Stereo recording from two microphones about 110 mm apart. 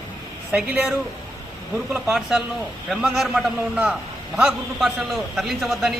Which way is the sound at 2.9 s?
5° right (ahead or behind).